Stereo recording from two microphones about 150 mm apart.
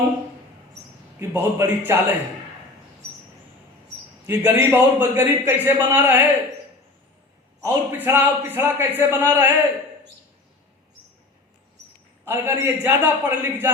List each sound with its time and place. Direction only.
1.3 s a man's voice: 15° right (ahead or behind)
4.3 s a man's voice: 15° right (ahead or behind)
7.6 s a man's voice: 15° right (ahead or behind)
12.2 s a man's voice: 15° right (ahead or behind)